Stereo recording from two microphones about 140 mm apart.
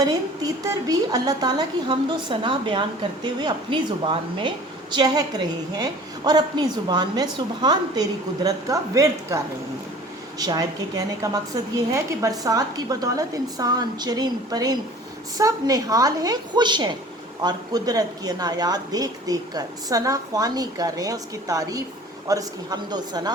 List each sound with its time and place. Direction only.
0.0 s a woman's voice: 25° right (ahead or behind)